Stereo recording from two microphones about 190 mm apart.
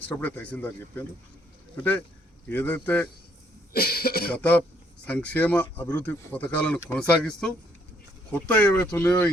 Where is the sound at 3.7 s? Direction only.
55° left (ahead or behind).